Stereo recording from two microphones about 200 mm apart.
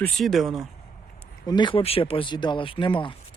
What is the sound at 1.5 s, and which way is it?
Speech, 25° left (ahead or behind).